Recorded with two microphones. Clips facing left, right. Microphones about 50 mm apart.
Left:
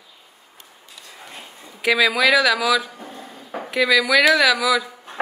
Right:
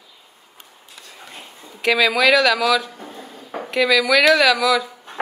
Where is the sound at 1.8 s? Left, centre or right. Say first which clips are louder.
Right 1 dB; centre.